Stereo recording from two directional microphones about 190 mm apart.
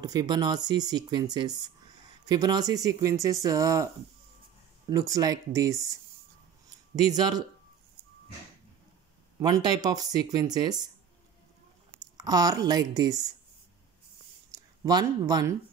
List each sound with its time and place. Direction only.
0.0 s speech: 20° right (ahead or behind)
7.0 s speech: 20° right (ahead or behind)
9.4 s speech: 20° right (ahead or behind)
12.2 s speech: 20° right (ahead or behind)
14.5 s speech: 20° right (ahead or behind)